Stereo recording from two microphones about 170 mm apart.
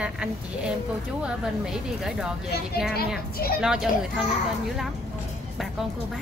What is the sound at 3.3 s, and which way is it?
Speech, 65° left (ahead or behind).